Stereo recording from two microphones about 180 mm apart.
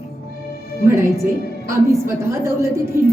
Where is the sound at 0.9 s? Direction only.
15° right (ahead or behind).